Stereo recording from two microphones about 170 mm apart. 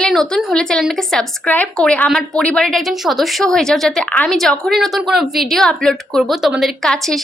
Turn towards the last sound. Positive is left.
turn(degrees=0)  # may be behind; listen again after turning